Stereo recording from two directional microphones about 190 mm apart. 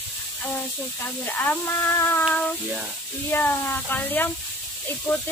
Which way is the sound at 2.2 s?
Centre (ahead or behind).